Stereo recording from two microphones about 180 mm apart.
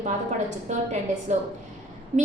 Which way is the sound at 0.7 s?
40° right (ahead or behind).